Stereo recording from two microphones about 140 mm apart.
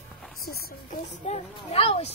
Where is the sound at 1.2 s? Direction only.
50° left (ahead or behind).